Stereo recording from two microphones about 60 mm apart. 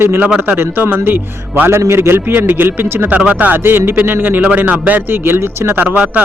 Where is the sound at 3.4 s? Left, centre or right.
Right.